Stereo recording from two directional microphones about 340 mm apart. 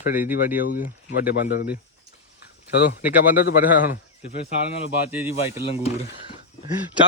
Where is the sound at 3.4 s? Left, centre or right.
Left.